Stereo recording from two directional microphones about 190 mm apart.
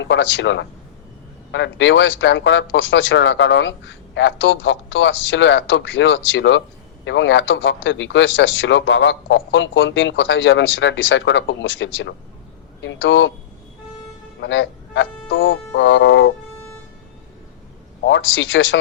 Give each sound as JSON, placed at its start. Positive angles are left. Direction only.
{"t": 0.0, "sound": "speech", "side_deg": 75}
{"t": 14.4, "sound": "speech", "side_deg": 70}
{"t": 18.0, "sound": "speech", "side_deg": 75}